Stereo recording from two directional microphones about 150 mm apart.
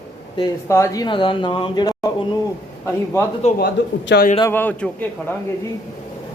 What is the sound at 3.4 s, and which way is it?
Speech, 50° left (ahead or behind).